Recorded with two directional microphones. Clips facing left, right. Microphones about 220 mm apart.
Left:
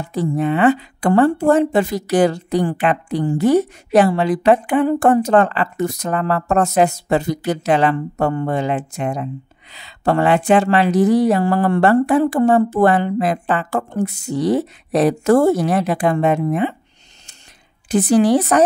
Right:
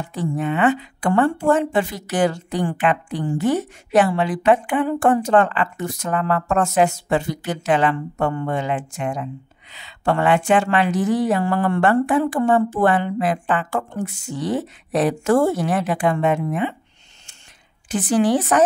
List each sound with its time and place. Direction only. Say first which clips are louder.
0.1 s speech: left 5 dB; 35° left (ahead or behind)
17.8 s speech: left 4 dB; 40° left (ahead or behind)